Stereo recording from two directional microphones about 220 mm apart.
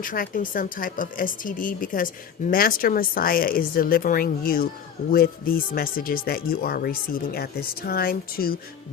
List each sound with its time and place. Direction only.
0.0 s a woman's voice: 40° left (ahead or behind)